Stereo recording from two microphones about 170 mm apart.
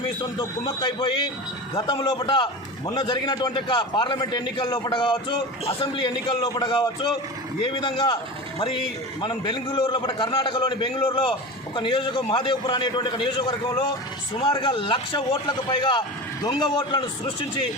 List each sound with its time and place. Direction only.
0.2 s a man's voice: 25° left (ahead or behind)